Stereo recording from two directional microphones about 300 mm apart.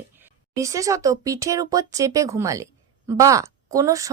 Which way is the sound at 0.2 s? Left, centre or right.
Centre.